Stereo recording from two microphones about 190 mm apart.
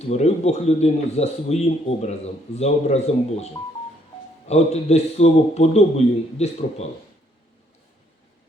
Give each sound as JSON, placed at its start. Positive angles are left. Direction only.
{"t": 0.1, "sound": "a man's voice", "side_deg": 35}